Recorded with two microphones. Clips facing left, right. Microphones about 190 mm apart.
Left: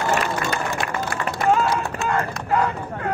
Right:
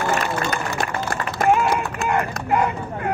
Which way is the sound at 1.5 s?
15° right (ahead or behind).